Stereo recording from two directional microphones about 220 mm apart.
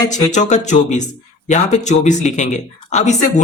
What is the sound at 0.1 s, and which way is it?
Speech, 35° left (ahead or behind).